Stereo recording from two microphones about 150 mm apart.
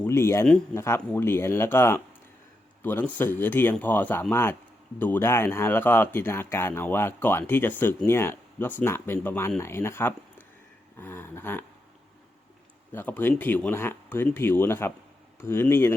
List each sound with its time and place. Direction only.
0.0 s speech: 15° left (ahead or behind)
12.9 s speech: 15° left (ahead or behind)